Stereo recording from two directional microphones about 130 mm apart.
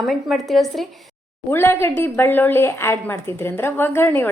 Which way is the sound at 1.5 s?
20° left (ahead or behind).